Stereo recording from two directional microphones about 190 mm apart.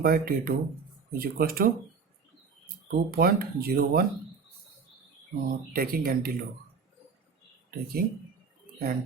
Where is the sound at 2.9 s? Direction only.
50° right (ahead or behind).